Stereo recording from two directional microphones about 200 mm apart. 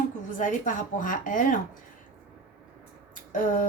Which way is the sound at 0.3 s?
40° left (ahead or behind).